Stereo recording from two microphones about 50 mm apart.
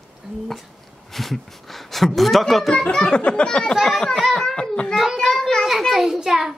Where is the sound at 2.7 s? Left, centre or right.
Centre.